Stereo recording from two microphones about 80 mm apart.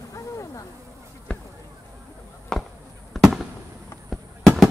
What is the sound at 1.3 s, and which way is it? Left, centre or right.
Basketball bounce, centre.